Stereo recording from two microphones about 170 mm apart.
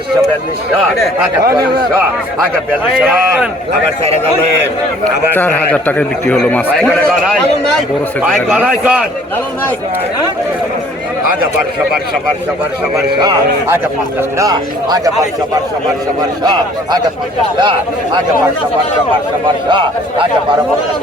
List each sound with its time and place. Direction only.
5.0 s a man's voice: 10° left (ahead or behind); by 9.0 s 5° right (ahead or behind)
14.2 s speech: 20° right (ahead or behind)
16.4 s speech: 25° right (ahead or behind)
19.6 s speech: 30° right (ahead or behind)